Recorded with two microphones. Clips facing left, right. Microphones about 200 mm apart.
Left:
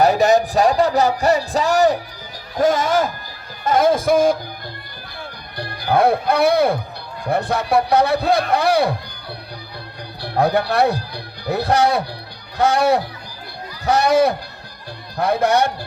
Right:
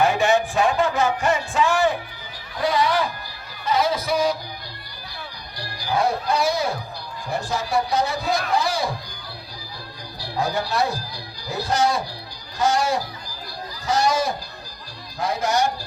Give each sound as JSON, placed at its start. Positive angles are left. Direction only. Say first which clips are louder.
{"t": 0.0, "sound": "music", "louder": "left 5 dB", "side_deg": 40}
{"t": 5.5, "sound": "speech", "louder": "left 6 dB", "side_deg": 55}
{"t": 10.2, "sound": "speech", "louder": "left 7 dB", "side_deg": 60}